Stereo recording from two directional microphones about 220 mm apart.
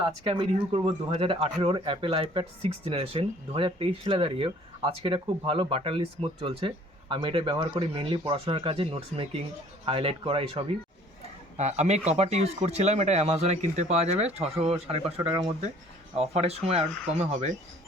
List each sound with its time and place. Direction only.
0.3 s speech: 25° right (ahead or behind)